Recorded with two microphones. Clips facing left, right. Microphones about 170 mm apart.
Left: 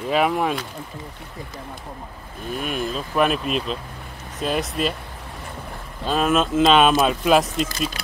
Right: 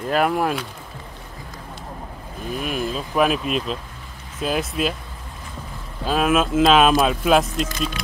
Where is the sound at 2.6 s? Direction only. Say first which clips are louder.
Right 1 dB; centre (ahead or behind).